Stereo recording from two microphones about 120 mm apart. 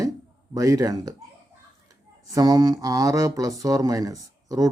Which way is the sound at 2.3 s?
30° right (ahead or behind).